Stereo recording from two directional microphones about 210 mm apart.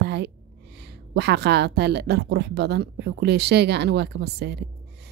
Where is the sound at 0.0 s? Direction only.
55° right (ahead or behind).